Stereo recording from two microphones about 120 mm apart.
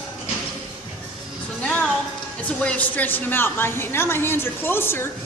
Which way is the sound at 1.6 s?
10° left (ahead or behind).